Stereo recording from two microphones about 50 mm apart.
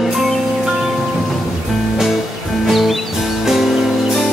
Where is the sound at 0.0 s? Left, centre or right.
Centre.